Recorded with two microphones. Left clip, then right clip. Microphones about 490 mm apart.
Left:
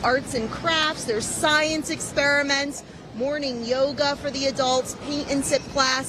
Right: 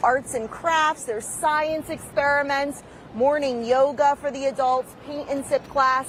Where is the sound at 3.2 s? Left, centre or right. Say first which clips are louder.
Right 5 dB; right.